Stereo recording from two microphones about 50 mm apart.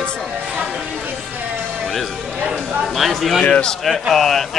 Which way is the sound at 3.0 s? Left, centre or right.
Centre.